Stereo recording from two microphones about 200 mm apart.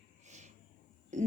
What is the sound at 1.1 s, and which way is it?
Speech, 35° right (ahead or behind).